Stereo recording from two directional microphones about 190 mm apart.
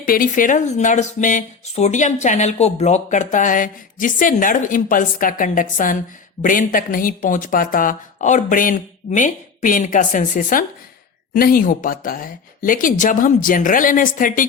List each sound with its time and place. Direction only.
0.0 s speech: 45° left (ahead or behind)